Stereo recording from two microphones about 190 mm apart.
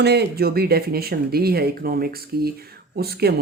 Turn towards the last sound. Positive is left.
turn(degrees=-55)  # may be behind; listen again after turning